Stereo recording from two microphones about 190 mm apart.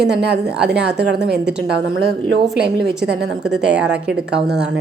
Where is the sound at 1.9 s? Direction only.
55° right (ahead or behind).